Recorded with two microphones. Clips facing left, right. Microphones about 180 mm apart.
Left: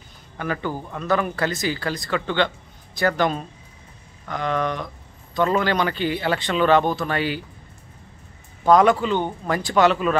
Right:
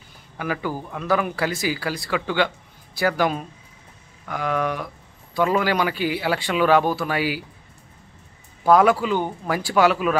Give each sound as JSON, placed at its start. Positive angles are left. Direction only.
{"t": 0.4, "sound": "speech", "side_deg": -10}
{"t": 8.6, "sound": "speech", "side_deg": -5}